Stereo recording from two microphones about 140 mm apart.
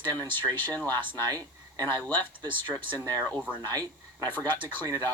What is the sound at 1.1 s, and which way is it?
Speech, 25° right (ahead or behind).